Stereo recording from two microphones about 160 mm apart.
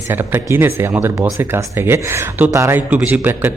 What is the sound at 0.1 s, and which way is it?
Speech, 15° right (ahead or behind).